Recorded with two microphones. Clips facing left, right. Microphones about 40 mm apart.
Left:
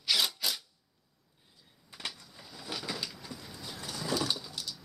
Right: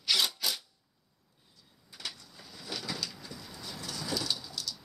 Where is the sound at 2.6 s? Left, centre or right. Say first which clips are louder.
Even; centre.